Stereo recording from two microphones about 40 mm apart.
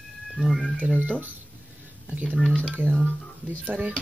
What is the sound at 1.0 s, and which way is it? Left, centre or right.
Speech, right.